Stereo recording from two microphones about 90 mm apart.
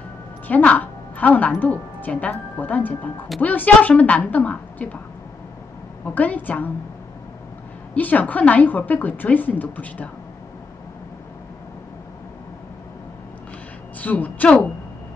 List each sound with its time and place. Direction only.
0.5 s a woman's voice: 20° left (ahead or behind)
6.0 s speech: 20° left (ahead or behind)
7.9 s speech: 20° left (ahead or behind)
14.0 s a woman's voice: 15° left (ahead or behind)